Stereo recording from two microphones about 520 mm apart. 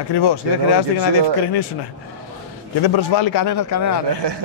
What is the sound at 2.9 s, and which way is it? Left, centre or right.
Speech, left.